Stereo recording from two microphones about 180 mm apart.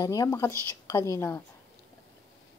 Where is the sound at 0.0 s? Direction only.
20° left (ahead or behind).